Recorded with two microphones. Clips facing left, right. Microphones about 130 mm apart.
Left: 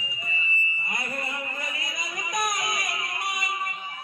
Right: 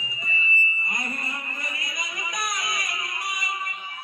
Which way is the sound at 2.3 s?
45° left (ahead or behind).